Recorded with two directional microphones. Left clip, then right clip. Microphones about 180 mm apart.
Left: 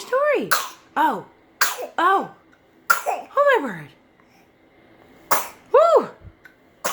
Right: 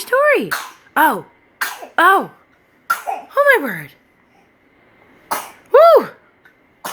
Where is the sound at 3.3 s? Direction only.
25° right (ahead or behind).